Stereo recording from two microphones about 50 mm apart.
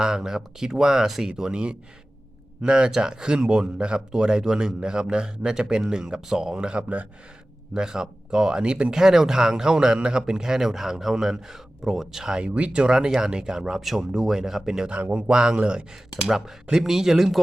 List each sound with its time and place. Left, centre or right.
0.0 s speech: centre
6.7 s speech: right
7.7 s speech: centre
12.4 s speech: right
14.8 s speech: right
16.7 s speech: centre